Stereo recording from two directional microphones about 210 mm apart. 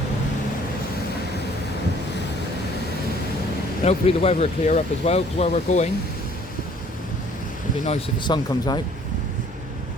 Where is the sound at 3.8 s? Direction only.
30° left (ahead or behind).